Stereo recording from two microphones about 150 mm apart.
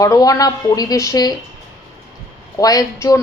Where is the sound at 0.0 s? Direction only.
25° left (ahead or behind).